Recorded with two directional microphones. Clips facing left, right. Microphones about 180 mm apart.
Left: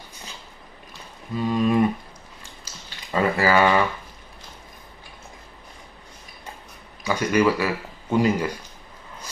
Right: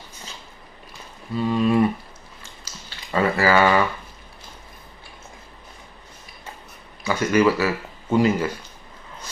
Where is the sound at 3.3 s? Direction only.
15° left (ahead or behind).